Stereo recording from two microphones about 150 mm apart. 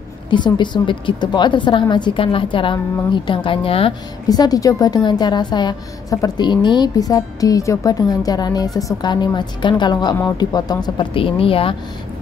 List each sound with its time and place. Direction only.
0.3 s a woman's voice: 30° left (ahead or behind)
4.3 s a woman's voice: 25° left (ahead or behind)